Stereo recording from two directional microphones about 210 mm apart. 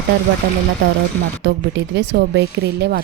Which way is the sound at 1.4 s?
55° right (ahead or behind).